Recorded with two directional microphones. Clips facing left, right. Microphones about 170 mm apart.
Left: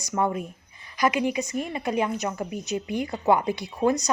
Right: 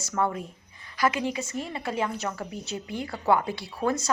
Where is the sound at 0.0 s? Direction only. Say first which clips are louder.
Left 2 dB; 15° left (ahead or behind).